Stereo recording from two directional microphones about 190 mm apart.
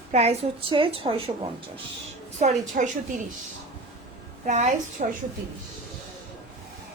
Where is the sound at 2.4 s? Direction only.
40° right (ahead or behind).